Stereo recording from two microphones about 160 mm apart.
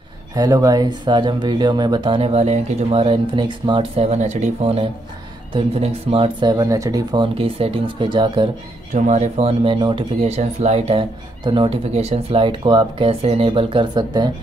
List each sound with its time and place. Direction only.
0.3 s speech: 20° right (ahead or behind)
8.9 s speech: 50° right (ahead or behind); by 14.3 s 25° right (ahead or behind)